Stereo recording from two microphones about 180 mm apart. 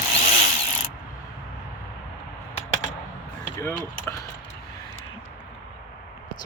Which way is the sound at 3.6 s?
15° left (ahead or behind).